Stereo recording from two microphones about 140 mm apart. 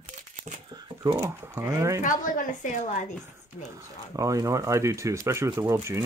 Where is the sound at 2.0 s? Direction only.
70° left (ahead or behind).